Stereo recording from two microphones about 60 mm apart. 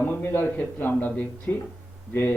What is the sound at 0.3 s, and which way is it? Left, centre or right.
Speech, left.